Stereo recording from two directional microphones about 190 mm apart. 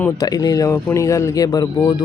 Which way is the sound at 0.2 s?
20° left (ahead or behind).